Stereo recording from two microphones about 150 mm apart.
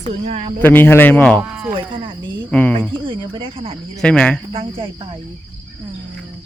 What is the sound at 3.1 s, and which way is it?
Speech, 35° right (ahead or behind).